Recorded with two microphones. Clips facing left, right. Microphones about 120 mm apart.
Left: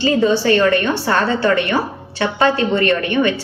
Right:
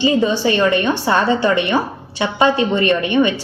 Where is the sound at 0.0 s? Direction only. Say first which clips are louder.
Even; 15° right (ahead or behind).